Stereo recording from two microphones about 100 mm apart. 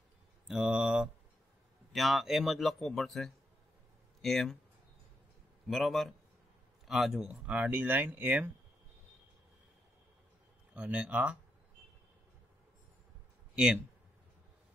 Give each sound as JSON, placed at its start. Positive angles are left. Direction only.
{"t": 0.5, "sound": "a man's voice", "side_deg": -10}
{"t": 5.7, "sound": "a man's voice", "side_deg": 0}
{"t": 10.7, "sound": "speech", "side_deg": -15}
{"t": 13.6, "sound": "speech", "side_deg": -15}